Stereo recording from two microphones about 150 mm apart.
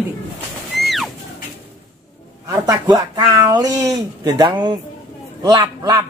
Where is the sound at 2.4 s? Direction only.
25° right (ahead or behind).